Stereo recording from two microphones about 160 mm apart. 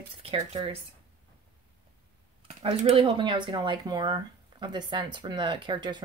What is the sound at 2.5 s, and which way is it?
Speech, 40° right (ahead or behind).